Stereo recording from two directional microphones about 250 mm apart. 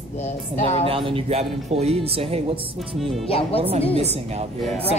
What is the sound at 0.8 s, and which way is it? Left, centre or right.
Speech, right.